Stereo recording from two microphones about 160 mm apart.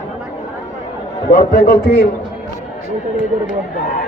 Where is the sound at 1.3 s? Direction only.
55° left (ahead or behind).